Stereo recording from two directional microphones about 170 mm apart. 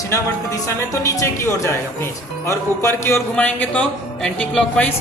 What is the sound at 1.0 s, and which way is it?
Speech, 20° left (ahead or behind).